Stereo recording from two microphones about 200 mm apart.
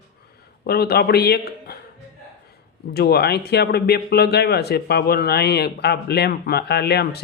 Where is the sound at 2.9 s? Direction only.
50° left (ahead or behind).